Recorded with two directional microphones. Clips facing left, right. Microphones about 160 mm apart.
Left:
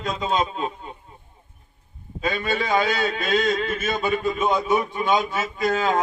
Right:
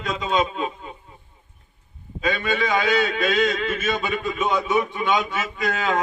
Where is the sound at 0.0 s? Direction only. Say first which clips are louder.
Right 1 dB; 40° left (ahead or behind).